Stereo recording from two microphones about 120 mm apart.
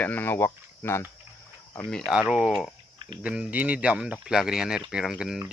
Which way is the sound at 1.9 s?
5° right (ahead or behind).